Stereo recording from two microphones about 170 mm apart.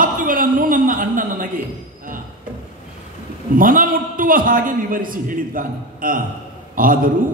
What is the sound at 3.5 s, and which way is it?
A man's voice, 55° right (ahead or behind).